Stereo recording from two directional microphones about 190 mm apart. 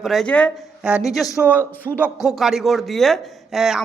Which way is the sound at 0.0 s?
Centre (ahead or behind).